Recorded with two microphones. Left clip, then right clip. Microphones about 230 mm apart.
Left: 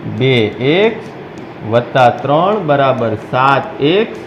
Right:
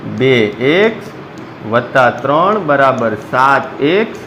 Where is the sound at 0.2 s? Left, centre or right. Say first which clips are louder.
Right 2 dB; right.